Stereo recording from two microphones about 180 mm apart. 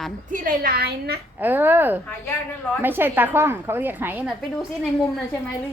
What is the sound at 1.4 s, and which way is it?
A woman's voice, 10° right (ahead or behind).